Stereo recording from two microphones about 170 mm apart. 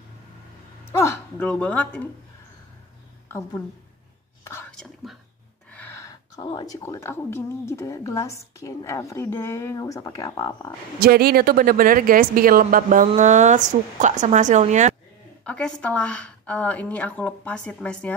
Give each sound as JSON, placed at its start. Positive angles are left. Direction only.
{"t": 0.9, "sound": "speech", "side_deg": 15}
{"t": 3.3, "sound": "a woman's voice", "side_deg": 15}
{"t": 4.6, "sound": "whispering", "side_deg": 5}
{"t": 5.7, "sound": "speech", "side_deg": 10}
{"t": 11.0, "sound": "speech", "side_deg": -65}
{"t": 15.4, "sound": "speech", "side_deg": 5}